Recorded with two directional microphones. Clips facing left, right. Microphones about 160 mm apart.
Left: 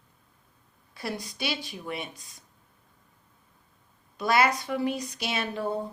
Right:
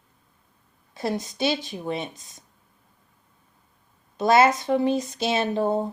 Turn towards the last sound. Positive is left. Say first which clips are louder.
# right 7 dB
turn(degrees=-45)  # may be behind; listen again after turning